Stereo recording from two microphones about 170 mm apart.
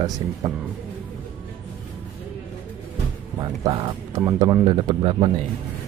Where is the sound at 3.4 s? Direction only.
25° right (ahead or behind).